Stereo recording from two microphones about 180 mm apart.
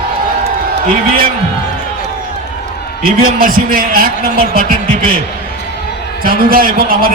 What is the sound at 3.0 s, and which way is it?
A man's voice, 55° right (ahead or behind).